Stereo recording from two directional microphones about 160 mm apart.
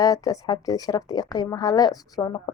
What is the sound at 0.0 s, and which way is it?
A woman's voice, 20° left (ahead or behind).